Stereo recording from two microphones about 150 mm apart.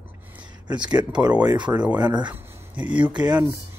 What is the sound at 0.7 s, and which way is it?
Speech, 30° right (ahead or behind).